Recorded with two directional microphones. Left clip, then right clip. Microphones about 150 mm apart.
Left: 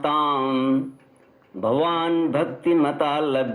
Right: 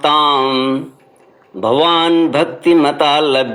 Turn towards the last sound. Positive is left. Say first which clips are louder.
# right 10 dB
turn(degrees=-30)  # may be behind; listen again after turning